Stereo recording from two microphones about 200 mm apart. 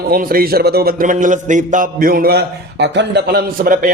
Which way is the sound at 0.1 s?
45° right (ahead or behind).